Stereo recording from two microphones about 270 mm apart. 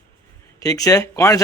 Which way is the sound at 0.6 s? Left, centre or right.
Centre.